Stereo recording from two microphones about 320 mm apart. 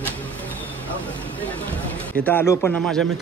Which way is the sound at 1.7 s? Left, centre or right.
Centre.